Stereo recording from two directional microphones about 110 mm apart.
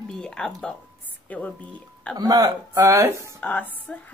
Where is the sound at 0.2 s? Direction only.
5° left (ahead or behind).